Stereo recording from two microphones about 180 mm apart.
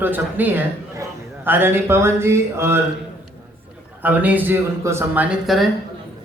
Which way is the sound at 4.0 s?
10° right (ahead or behind).